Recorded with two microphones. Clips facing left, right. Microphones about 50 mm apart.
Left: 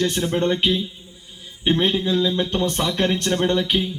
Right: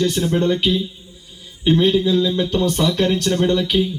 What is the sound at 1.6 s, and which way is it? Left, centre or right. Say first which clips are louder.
Speech: right 4 dB; left.